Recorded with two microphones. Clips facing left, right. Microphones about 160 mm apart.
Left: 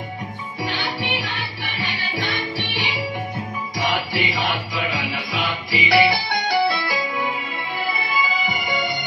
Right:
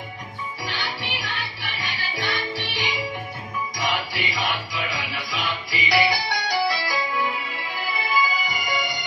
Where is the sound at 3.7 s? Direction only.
55° left (ahead or behind).